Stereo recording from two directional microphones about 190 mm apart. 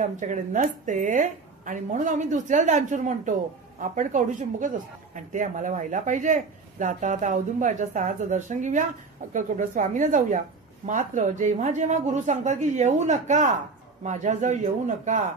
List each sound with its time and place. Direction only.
0.0 s a woman's voice: 40° right (ahead or behind)